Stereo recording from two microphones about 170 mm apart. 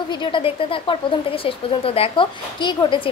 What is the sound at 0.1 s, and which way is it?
A woman's voice, 30° left (ahead or behind).